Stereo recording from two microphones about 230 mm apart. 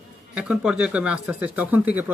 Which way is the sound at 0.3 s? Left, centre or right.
Centre.